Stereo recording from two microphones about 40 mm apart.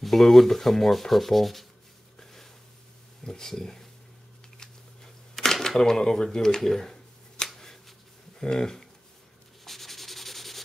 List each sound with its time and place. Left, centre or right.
0.0 s sanding: centre
2.1 s a sound: centre
3.3 s speech: centre
4.6 s camera: centre
7.4 s finger snapping: centre
8.4 s speech: centre
9.7 s sanding: centre